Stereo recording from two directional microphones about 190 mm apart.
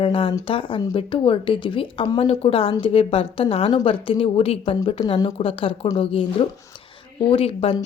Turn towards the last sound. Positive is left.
turn(degrees=30)  # may be behind; listen again after turning